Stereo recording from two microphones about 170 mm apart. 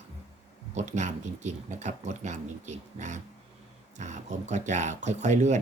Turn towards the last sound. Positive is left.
turn(degrees=-45)  # may be behind; listen again after turning